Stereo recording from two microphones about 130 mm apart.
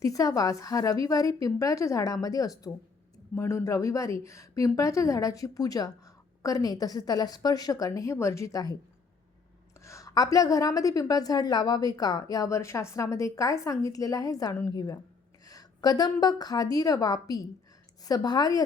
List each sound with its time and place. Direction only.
0.0 s a woman's voice: 25° left (ahead or behind)
9.8 s a woman's voice: 25° left (ahead or behind)